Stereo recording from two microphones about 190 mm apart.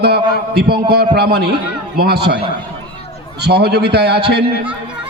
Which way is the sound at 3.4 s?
60° right (ahead or behind).